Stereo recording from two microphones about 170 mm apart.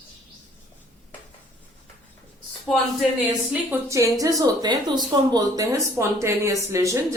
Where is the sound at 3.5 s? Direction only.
15° right (ahead or behind).